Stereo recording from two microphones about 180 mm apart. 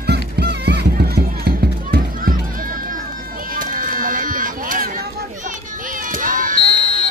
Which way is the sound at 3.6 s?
50° right (ahead or behind).